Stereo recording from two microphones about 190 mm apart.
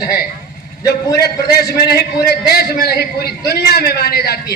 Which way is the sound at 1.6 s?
55° left (ahead or behind).